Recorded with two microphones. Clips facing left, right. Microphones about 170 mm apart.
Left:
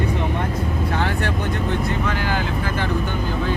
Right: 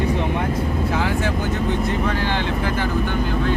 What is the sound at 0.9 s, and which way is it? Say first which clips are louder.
Speech: right 1 dB; 5° right (ahead or behind).